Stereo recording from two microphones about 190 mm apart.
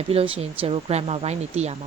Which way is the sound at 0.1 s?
30° right (ahead or behind).